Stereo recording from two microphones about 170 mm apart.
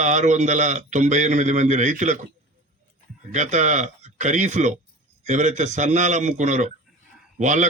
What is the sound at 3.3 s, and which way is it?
Speech, 45° right (ahead or behind).